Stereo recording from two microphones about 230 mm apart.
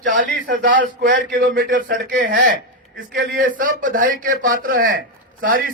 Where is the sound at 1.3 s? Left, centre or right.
Right.